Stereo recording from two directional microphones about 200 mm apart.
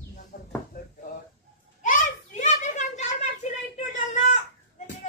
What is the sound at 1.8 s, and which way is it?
Children playing, 40° left (ahead or behind).